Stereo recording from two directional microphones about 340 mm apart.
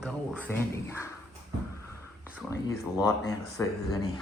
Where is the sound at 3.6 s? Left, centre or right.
Centre.